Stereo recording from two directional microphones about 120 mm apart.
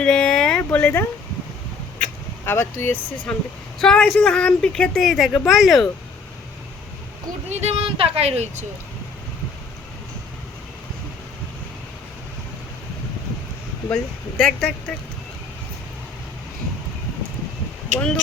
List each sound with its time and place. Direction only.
0.0 s a sound: 5° left (ahead or behind)
2.4 s speech: 20° left (ahead or behind)
3.3 s speech: 5° left (ahead or behind)
7.5 s speech: 65° right (ahead or behind)
13.9 s speech: 10° left (ahead or behind)
17.9 s speech: 90° right